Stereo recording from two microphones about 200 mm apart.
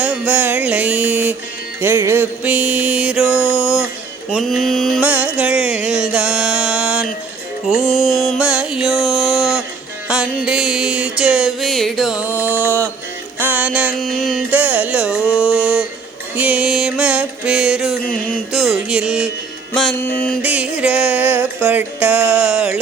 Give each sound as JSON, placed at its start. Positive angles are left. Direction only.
{"t": 0.0, "sound": "music", "side_deg": -5}
{"t": 13.4, "sound": "carnatic music", "side_deg": -10}
{"t": 15.4, "sound": "a sound", "side_deg": -5}
{"t": 16.3, "sound": "music", "side_deg": -5}
{"t": 18.0, "sound": "mantra", "side_deg": 45}
{"t": 18.5, "sound": "music", "side_deg": 0}
{"t": 20.4, "sound": "music", "side_deg": -5}